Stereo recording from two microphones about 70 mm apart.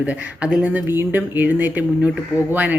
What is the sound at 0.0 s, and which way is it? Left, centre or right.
Speech, centre.